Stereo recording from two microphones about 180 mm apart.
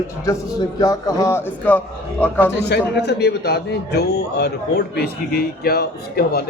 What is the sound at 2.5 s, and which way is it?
A man's voice, 65° left (ahead or behind).